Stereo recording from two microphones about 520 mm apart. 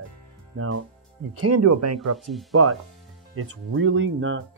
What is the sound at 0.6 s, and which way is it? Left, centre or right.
Speech, right.